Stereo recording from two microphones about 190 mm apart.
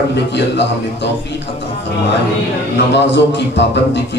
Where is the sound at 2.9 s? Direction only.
65° left (ahead or behind).